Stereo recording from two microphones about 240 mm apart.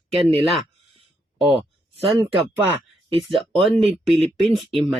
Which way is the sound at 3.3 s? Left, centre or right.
Centre.